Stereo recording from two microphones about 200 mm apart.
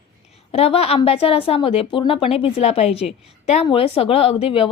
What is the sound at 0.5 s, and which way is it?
A woman's voice, 30° left (ahead or behind).